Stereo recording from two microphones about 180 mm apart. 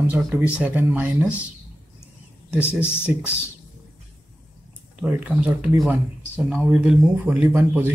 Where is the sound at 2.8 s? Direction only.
15° left (ahead or behind).